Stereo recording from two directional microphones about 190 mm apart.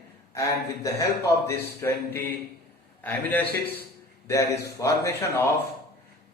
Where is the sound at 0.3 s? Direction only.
15° left (ahead or behind).